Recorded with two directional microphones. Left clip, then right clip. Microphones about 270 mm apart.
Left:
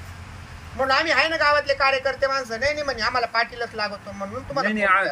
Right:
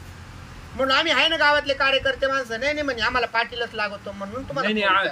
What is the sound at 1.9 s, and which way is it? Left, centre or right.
A man's voice, centre.